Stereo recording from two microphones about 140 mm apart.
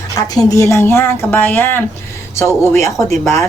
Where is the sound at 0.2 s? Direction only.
25° left (ahead or behind).